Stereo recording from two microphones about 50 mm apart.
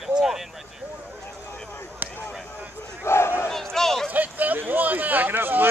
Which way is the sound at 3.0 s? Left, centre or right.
Left.